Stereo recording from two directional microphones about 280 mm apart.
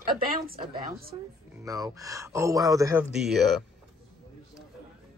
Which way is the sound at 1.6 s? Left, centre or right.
Centre.